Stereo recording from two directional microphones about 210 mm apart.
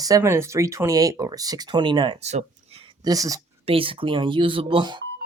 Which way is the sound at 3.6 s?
25° right (ahead or behind).